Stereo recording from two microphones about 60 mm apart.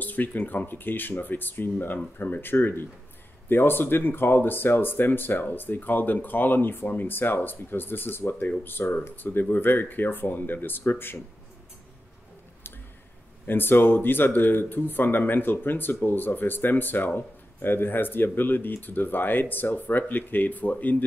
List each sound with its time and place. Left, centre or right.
0.0 s speech: left
13.5 s speech: left